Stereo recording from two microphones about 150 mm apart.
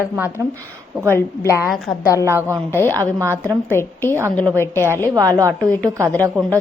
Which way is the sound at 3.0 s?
15° right (ahead or behind).